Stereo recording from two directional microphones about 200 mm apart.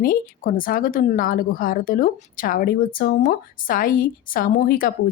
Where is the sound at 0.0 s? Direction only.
45° left (ahead or behind).